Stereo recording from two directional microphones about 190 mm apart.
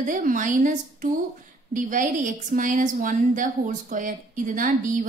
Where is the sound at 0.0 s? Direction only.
45° right (ahead or behind).